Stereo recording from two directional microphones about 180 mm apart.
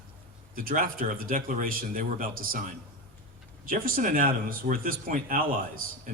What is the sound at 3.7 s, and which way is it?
Speech, 50° right (ahead or behind).